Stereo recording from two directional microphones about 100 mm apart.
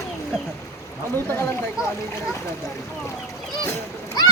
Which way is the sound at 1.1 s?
20° left (ahead or behind).